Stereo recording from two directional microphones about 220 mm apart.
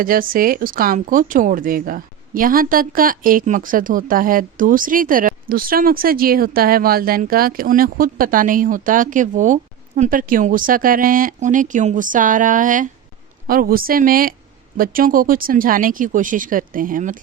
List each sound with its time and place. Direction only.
0.0 s speech: 40° right (ahead or behind)